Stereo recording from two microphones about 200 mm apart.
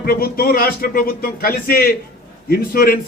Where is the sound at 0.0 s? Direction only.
50° left (ahead or behind).